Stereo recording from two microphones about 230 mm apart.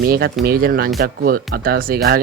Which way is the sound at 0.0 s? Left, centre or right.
Right.